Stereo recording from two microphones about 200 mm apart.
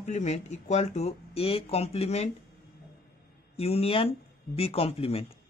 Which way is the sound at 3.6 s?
30° left (ahead or behind).